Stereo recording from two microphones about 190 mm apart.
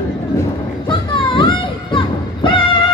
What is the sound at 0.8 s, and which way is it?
Music, 25° left (ahead or behind).